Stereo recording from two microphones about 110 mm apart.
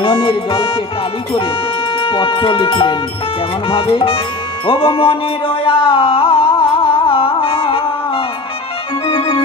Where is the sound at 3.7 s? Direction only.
55° left (ahead or behind).